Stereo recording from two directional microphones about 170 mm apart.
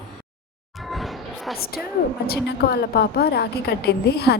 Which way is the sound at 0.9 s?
Centre (ahead or behind).